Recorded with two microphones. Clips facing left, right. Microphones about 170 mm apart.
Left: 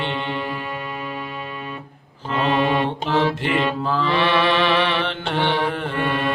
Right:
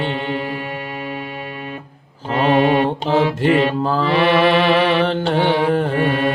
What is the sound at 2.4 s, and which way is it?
Mantra, 50° right (ahead or behind).